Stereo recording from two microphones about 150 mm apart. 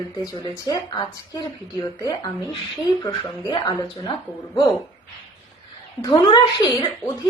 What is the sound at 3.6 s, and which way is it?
Speech, 20° left (ahead or behind).